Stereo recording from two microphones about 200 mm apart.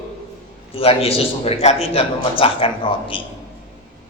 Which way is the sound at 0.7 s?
30° left (ahead or behind).